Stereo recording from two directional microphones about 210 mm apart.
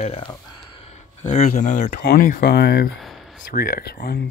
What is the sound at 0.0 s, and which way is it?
Speech, 30° left (ahead or behind).